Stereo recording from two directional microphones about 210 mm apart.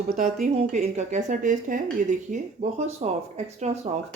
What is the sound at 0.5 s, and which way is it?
Speech, 30° right (ahead or behind).